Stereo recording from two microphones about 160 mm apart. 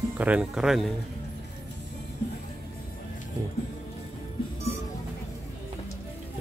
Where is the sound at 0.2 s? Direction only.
10° right (ahead or behind).